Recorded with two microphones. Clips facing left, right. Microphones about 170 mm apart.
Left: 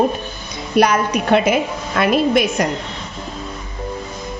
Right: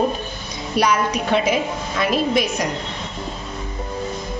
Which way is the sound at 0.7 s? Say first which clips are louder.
Left 4 dB; 60° left (ahead or behind).